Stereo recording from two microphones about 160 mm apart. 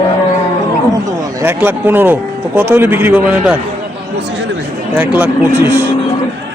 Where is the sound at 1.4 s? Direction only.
10° right (ahead or behind).